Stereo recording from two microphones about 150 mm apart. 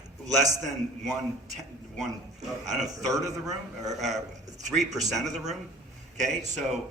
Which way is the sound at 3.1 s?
25° right (ahead or behind).